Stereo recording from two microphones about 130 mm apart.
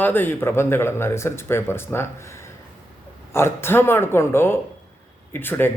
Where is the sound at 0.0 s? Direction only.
15° left (ahead or behind).